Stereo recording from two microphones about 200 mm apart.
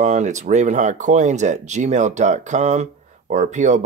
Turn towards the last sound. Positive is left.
turn(degrees=-35)  # may be behind; listen again after turning